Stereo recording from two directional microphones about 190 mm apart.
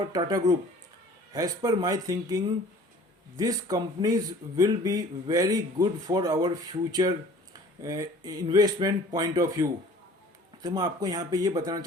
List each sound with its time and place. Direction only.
0.1 s speech: 20° right (ahead or behind)